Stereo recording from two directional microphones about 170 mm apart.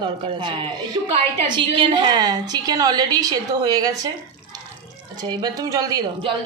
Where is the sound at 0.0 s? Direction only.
30° right (ahead or behind).